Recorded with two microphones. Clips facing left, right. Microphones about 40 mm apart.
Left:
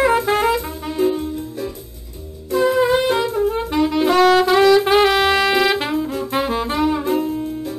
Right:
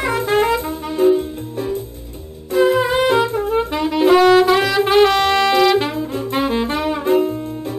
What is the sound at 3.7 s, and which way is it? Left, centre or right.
Saxophone, centre.